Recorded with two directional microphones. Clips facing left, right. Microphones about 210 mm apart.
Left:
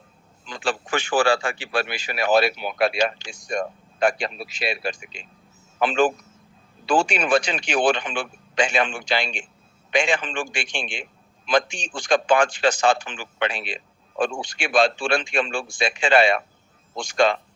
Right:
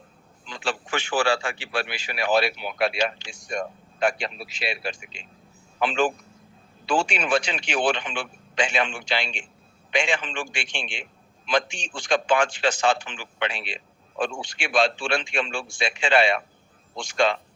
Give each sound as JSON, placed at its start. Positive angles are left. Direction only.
{"t": 0.4, "sound": "speech", "side_deg": 45}
{"t": 12.0, "sound": "speech", "side_deg": 45}